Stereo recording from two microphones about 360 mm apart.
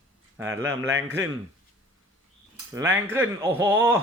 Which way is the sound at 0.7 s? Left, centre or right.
Right.